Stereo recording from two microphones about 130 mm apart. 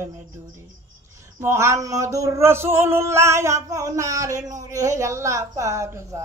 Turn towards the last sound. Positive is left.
turn(degrees=-25)  # may be behind; listen again after turning